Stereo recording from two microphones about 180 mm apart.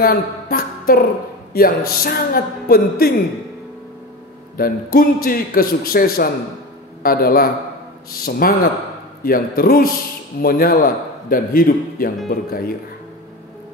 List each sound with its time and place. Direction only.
0.0 s a woman's voice: 55° left (ahead or behind)
4.6 s a man's voice: 55° left (ahead or behind)